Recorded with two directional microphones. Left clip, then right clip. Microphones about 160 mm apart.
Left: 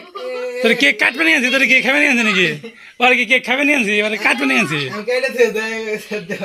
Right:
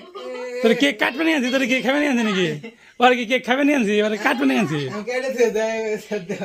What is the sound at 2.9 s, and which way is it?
A man's voice, 40° right (ahead or behind).